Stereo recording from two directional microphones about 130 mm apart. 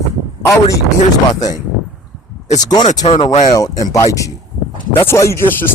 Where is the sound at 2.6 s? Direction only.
30° left (ahead or behind).